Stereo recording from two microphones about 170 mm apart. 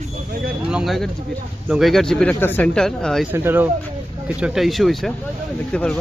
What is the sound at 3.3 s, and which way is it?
A man's voice, 10° right (ahead or behind).